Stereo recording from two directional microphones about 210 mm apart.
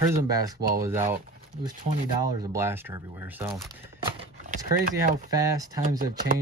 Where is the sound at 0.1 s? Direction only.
15° right (ahead or behind).